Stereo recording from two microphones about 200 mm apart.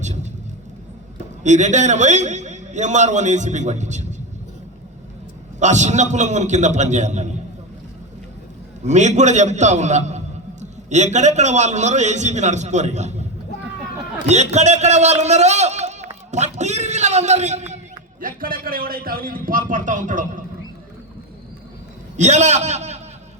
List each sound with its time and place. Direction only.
0.0 s vehicle: 35° right (ahead or behind)
1.5 s a man's voice: 35° right (ahead or behind)
5.5 s a man's voice: 35° right (ahead or behind)
8.8 s a man's voice: 35° right (ahead or behind)
14.3 s a man's voice: 35° right (ahead or behind)
22.2 s a man's voice: 35° right (ahead or behind)